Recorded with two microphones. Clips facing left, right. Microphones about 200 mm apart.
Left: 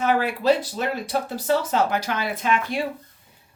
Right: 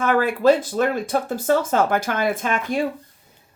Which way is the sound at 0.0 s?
50° right (ahead or behind).